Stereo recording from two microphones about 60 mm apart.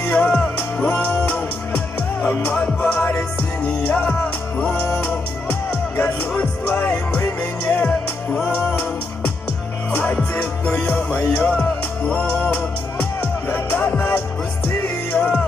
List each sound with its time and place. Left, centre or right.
0.0 s music: left
10.6 s music: left
10.9 s music: left
13.5 s music: left